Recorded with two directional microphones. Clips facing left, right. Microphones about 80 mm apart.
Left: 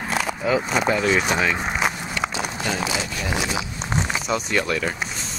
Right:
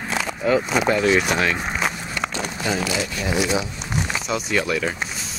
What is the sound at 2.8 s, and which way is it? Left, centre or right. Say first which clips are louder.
Speech: right 1 dB; left.